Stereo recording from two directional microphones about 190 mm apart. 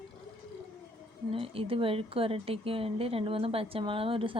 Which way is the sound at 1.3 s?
30° right (ahead or behind).